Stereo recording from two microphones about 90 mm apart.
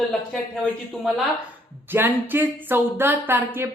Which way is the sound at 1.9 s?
20° right (ahead or behind).